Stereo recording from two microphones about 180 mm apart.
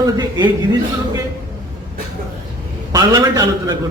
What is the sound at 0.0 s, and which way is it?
Speech, 25° right (ahead or behind).